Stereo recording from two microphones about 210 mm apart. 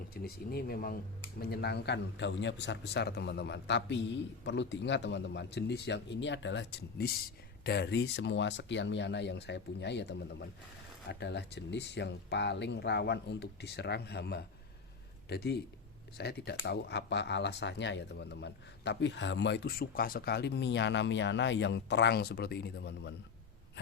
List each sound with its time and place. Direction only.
0.1 s speech: 45° left (ahead or behind)